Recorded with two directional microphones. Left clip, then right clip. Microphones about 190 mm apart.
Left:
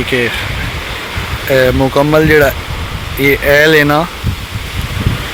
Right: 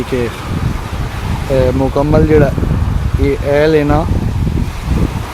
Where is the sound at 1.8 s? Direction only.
15° left (ahead or behind).